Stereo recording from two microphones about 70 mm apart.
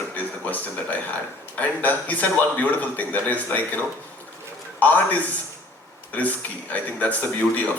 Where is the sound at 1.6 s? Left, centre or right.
Left.